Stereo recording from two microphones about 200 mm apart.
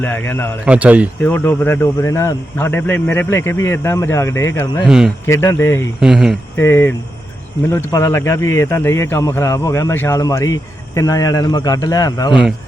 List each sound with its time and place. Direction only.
0.0 s speech: 10° left (ahead or behind)
0.6 s speech: 5° right (ahead or behind)
1.2 s speech: 10° left (ahead or behind)
4.9 s speech: 5° right (ahead or behind)
5.2 s speech: 15° left (ahead or behind)
6.0 s speech: centre (ahead or behind)
6.6 s speech: 10° left (ahead or behind)
12.3 s speech: 5° right (ahead or behind)